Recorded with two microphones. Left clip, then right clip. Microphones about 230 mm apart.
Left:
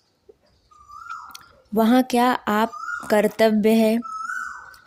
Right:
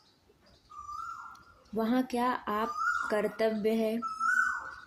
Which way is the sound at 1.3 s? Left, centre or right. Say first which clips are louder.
Left 16 dB; left.